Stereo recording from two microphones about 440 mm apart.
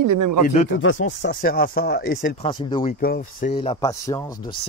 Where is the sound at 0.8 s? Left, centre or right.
Left.